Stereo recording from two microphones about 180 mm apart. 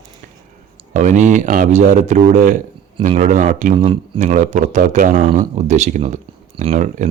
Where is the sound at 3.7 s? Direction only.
30° right (ahead or behind).